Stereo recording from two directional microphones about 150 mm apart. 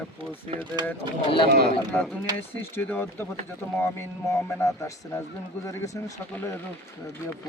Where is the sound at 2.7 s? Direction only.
15° left (ahead or behind).